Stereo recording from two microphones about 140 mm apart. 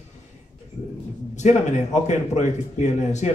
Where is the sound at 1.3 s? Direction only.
55° left (ahead or behind).